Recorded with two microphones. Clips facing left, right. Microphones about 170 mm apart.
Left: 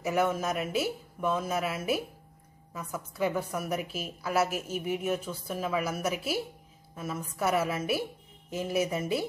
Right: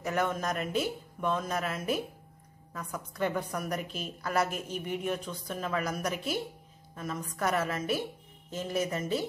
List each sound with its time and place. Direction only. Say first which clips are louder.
0.0 s a woman's voice: left 3 dB; 5° left (ahead or behind)